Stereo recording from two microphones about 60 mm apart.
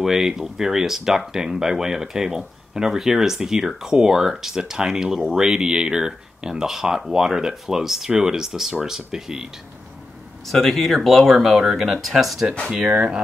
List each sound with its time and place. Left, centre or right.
0.0 s speech: centre
10.4 s speech: centre
12.7 s speech: right